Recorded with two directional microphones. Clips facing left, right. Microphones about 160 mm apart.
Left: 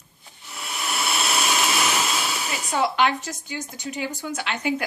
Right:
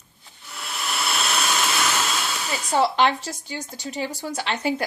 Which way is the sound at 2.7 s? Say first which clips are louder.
Right 2 dB; 35° right (ahead or behind).